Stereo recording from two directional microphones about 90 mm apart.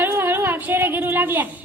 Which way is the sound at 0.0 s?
25° right (ahead or behind).